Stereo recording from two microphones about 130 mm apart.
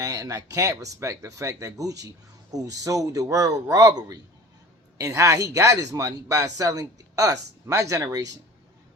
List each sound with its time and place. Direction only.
0.0 s speech: 25° right (ahead or behind)